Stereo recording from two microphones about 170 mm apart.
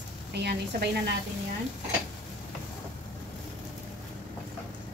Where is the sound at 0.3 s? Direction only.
75° right (ahead or behind).